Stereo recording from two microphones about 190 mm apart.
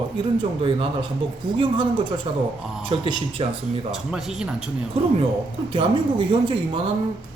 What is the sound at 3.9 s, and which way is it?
Speech, centre (ahead or behind).